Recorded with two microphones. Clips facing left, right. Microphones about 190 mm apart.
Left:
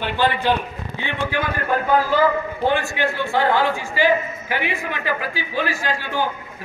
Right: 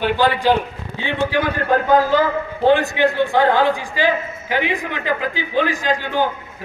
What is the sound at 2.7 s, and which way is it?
A man's voice, 20° right (ahead or behind).